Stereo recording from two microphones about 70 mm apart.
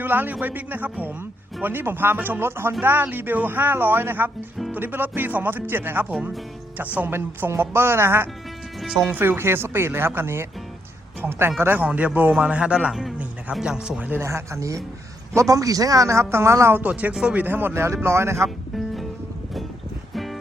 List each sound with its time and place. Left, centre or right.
0.0 s speech: right
12.9 s a man's voice: centre
14.2 s a man's voice: right
16.8 s speech: centre
17.4 s speech: right
17.8 s speech: right
20.1 s music: centre